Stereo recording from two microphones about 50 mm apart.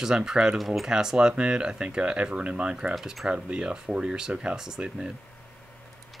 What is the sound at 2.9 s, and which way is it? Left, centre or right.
Speech, centre.